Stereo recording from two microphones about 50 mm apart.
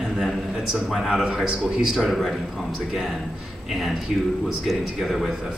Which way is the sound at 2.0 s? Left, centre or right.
Centre.